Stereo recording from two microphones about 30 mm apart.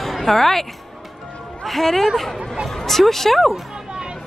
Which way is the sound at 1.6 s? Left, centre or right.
Centre.